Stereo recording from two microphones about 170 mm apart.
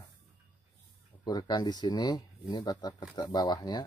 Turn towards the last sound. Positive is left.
turn(degrees=25)  # may be behind; listen again after turning